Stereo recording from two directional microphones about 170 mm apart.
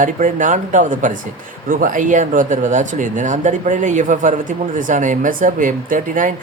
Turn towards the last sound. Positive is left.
turn(degrees=-50)  # may be behind; listen again after turning